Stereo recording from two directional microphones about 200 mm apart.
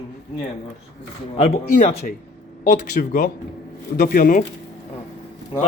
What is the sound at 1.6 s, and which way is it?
Speech, 50° left (ahead or behind).